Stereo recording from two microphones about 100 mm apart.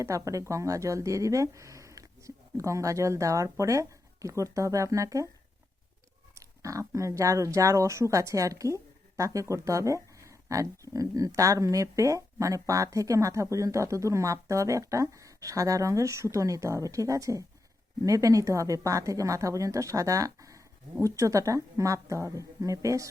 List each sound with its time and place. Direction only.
0.0 s speech: 30° right (ahead or behind)
6.4 s speech: 35° right (ahead or behind)